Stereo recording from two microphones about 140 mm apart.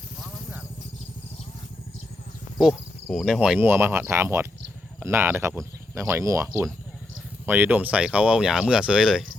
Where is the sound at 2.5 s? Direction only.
Centre (ahead or behind).